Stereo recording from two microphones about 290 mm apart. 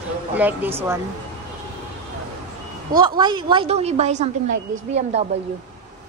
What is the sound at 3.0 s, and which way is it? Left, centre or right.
A woman's voice, centre.